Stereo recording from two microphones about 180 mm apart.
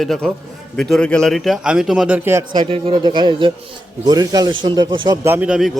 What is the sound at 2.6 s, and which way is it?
Speech, 30° right (ahead or behind).